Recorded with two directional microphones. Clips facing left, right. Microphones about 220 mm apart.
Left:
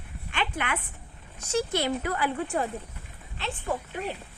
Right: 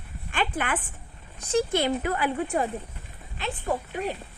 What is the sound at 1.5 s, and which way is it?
Speech, 30° right (ahead or behind).